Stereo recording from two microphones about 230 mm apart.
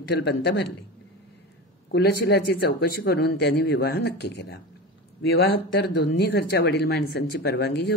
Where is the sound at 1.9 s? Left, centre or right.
Left.